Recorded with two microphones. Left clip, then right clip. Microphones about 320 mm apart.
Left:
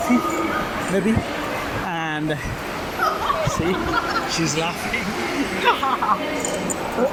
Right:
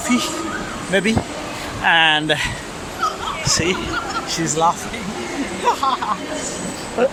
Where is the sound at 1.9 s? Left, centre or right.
Right.